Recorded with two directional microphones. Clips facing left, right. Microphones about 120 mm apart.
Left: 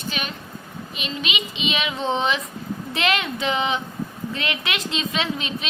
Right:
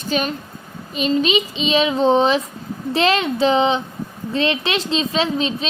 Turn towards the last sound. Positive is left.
turn(degrees=-30)  # may be behind; listen again after turning